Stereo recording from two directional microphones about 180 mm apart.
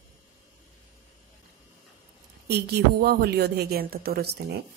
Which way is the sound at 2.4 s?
65° right (ahead or behind).